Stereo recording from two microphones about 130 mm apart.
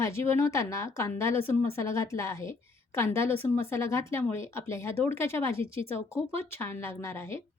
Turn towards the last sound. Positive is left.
turn(degrees=20)  # may be behind; listen again after turning